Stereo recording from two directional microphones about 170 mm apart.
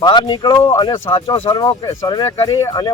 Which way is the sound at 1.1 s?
35° left (ahead or behind).